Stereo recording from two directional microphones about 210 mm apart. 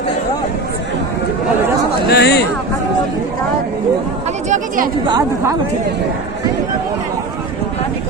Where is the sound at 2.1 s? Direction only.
50° left (ahead or behind).